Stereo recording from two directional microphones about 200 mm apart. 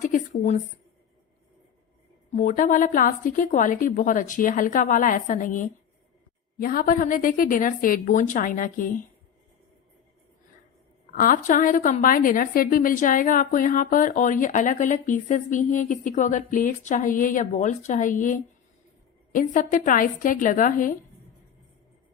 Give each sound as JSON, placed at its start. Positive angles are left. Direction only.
{"t": 0.0, "sound": "speech", "side_deg": 40}
{"t": 2.3, "sound": "a woman's voice", "side_deg": 40}
{"t": 11.1, "sound": "a woman's voice", "side_deg": 40}